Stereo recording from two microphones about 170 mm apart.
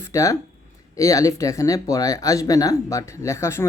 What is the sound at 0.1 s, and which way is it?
Speech, 20° left (ahead or behind).